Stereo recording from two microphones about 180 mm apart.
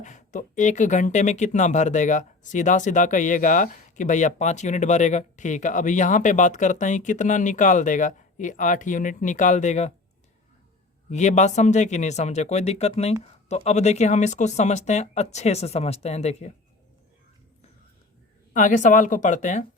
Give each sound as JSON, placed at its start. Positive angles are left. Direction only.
{"t": 0.0, "sound": "speech", "side_deg": 45}
{"t": 11.1, "sound": "speech", "side_deg": 40}
{"t": 18.5, "sound": "speech", "side_deg": 45}